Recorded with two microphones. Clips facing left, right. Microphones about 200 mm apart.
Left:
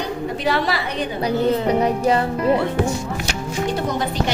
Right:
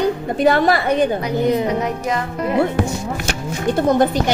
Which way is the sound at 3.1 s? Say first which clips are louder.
Right 1 dB; 55° right (ahead or behind).